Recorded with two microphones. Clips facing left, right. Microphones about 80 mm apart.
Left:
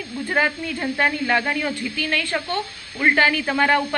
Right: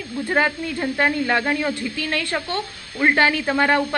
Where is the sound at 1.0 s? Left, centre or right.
Right.